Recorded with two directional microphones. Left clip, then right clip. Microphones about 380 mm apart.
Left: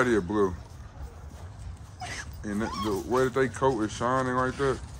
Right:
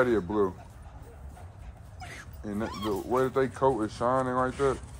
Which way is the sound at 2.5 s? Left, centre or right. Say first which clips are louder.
Left 2 dB; centre.